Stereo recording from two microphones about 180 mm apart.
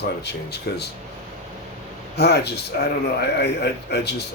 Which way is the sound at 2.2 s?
65° left (ahead or behind).